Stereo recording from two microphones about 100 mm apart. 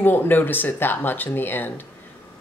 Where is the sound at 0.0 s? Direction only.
20° left (ahead or behind).